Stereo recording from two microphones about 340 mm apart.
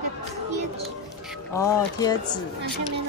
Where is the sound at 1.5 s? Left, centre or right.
Centre.